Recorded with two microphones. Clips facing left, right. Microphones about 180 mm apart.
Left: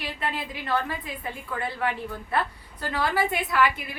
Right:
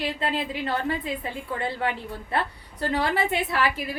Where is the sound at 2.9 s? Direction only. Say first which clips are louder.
Right 1 dB; 25° right (ahead or behind).